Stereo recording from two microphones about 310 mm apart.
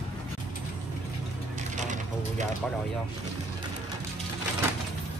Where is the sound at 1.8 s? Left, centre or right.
Right.